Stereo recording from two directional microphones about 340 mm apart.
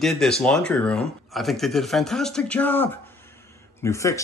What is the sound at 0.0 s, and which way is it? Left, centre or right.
Speech, centre.